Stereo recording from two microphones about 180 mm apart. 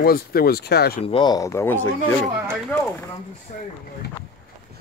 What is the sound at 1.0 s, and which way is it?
Speech, 25° left (ahead or behind).